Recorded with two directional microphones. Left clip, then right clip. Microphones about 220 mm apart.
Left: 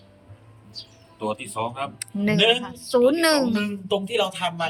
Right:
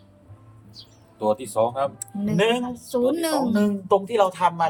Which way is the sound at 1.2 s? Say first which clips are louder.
Right 6 dB; 25° right (ahead or behind).